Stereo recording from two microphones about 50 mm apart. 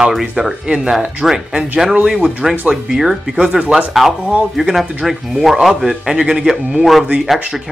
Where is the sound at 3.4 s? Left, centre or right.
Centre.